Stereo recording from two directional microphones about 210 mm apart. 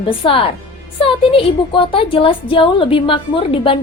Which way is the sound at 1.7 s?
25° left (ahead or behind).